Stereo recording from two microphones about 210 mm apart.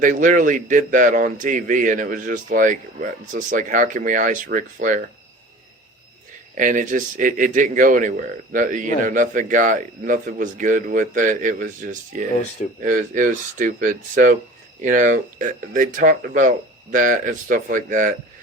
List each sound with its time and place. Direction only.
0.0 s a man's voice: 40° right (ahead or behind)
6.6 s a man's voice: 40° right (ahead or behind)